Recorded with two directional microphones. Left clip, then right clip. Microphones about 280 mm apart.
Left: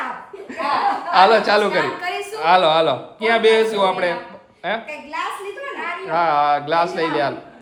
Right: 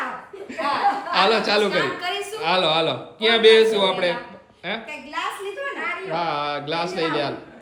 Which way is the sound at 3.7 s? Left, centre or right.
Left.